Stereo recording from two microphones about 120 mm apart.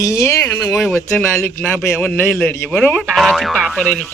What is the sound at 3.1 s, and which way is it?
Speech, centre (ahead or behind).